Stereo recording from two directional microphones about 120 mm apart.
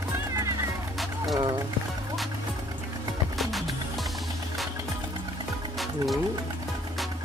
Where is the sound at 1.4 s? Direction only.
35° right (ahead or behind).